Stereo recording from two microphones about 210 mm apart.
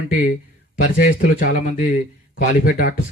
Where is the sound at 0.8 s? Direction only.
40° left (ahead or behind).